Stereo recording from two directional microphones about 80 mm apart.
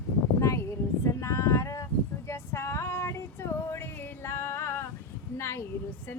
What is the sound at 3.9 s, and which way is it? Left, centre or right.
Music, left.